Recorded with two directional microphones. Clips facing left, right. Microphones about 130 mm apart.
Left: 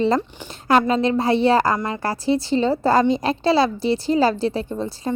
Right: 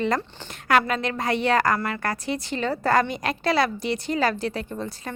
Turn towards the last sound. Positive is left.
turn(degrees=30)  # may be behind; listen again after turning